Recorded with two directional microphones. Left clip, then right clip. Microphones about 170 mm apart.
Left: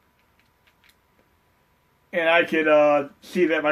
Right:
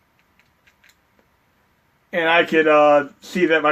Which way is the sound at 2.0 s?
45° right (ahead or behind).